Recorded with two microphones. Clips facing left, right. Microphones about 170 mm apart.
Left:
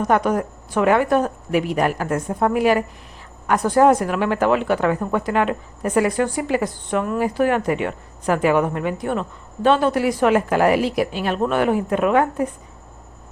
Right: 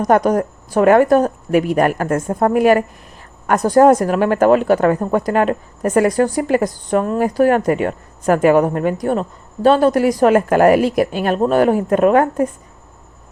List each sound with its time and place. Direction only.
0.0 s speech: 40° right (ahead or behind)